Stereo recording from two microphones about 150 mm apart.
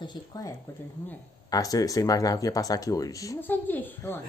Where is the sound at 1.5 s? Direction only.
25° left (ahead or behind).